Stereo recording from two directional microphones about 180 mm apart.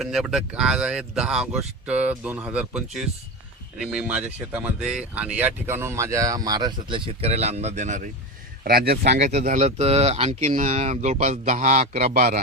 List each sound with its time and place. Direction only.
0.0 s speech: centre (ahead or behind); by 8.1 s 45° right (ahead or behind)
8.6 s speech: 60° right (ahead or behind)
9.1 s a man's voice: 40° right (ahead or behind)